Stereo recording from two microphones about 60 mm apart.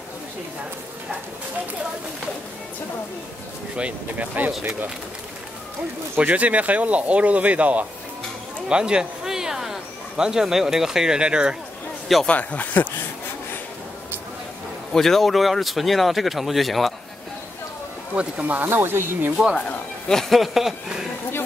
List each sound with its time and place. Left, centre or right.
3.7 s speech: right
6.1 s speech: right
12.3 s speech: left
14.9 s speech: centre
18.1 s speech: right
20.1 s speech: centre